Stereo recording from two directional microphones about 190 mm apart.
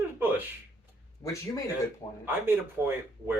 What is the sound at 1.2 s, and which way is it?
Speech, 15° left (ahead or behind).